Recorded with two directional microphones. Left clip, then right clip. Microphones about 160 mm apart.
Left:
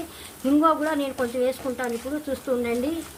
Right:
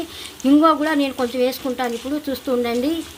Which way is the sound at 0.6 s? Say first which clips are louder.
Right 4 dB; 30° right (ahead or behind).